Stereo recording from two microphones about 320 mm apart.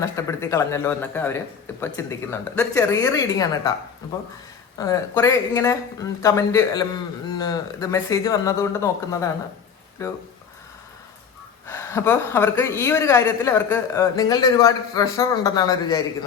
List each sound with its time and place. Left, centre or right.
0.0 s speech: centre
4.8 s speech: centre
11.6 s speech: centre